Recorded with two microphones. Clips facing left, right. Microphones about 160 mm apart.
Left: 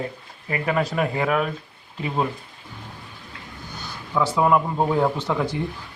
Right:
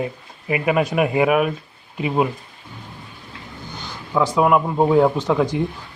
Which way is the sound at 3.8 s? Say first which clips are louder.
Right 3 dB; 15° right (ahead or behind).